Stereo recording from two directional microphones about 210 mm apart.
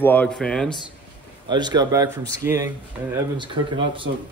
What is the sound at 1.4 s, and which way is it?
A man's voice, 20° right (ahead or behind).